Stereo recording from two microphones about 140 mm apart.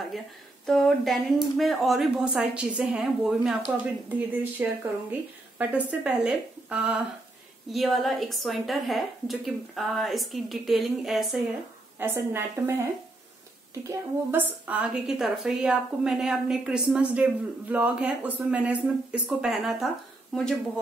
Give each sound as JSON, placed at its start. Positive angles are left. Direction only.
{"t": 0.7, "sound": "a woman's voice", "side_deg": 0}
{"t": 12.0, "sound": "a woman's voice", "side_deg": -15}
{"t": 13.8, "sound": "a woman's voice", "side_deg": -10}